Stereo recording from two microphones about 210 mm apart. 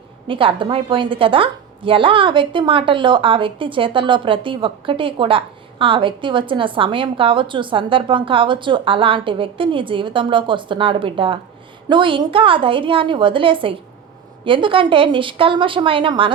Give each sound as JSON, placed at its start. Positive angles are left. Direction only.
{"t": 0.3, "sound": "a woman's voice", "side_deg": -25}